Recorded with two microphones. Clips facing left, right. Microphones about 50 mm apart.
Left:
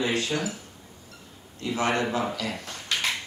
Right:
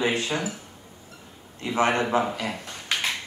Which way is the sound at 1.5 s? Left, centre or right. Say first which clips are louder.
Right 3 dB; right.